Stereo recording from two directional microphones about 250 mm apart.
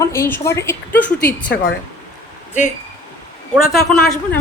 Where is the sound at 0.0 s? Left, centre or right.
Centre.